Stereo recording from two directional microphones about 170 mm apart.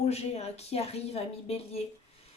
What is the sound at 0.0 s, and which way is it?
A woman's voice, 40° left (ahead or behind).